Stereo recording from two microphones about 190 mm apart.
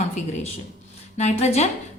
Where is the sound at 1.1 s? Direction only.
35° left (ahead or behind).